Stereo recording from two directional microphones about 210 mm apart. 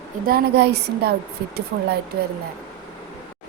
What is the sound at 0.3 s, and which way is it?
Speech, 50° right (ahead or behind).